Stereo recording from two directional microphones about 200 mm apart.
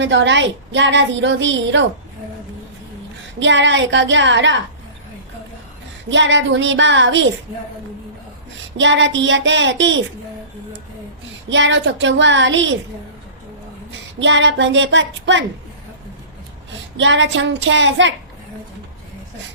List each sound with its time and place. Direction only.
0.0 s a woman's voice: 65° right (ahead or behind)
3.4 s a woman's voice: 65° right (ahead or behind)
6.1 s a woman's voice: 65° right (ahead or behind)
8.8 s speech: 65° right (ahead or behind)
11.4 s speech: 65° right (ahead or behind)
14.2 s speech: 65° right (ahead or behind)
17.0 s a woman's voice: 65° right (ahead or behind)